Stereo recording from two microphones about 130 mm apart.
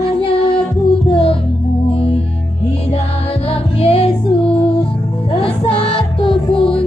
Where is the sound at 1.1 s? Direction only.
45° left (ahead or behind).